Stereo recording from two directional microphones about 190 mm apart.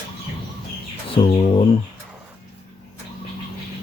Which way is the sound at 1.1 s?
30° left (ahead or behind).